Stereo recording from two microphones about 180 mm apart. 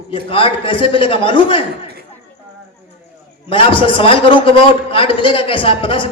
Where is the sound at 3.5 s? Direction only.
30° left (ahead or behind).